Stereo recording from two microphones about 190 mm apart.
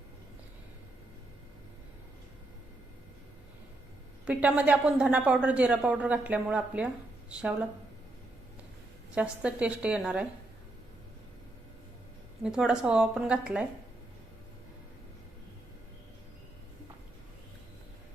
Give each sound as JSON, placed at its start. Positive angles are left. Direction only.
{"t": 4.3, "sound": "a woman's voice", "side_deg": -5}
{"t": 9.1, "sound": "a woman's voice", "side_deg": -5}
{"t": 12.4, "sound": "a woman's voice", "side_deg": -5}